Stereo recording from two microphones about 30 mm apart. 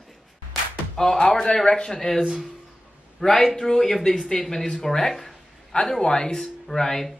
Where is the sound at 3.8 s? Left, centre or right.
Centre.